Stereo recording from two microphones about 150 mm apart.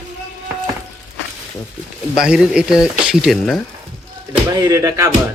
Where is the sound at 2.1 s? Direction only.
5° right (ahead or behind).